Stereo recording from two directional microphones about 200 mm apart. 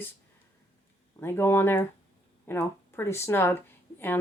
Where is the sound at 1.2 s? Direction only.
10° left (ahead or behind).